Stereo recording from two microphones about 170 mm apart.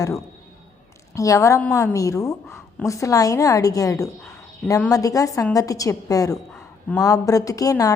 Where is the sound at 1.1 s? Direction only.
20° left (ahead or behind).